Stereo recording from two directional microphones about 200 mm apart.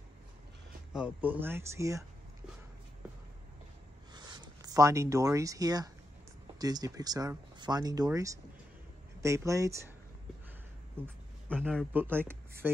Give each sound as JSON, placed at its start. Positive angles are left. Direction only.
{"t": 0.9, "sound": "speech", "side_deg": -5}
{"t": 4.1, "sound": "speech", "side_deg": -20}
{"t": 11.6, "sound": "speech", "side_deg": -5}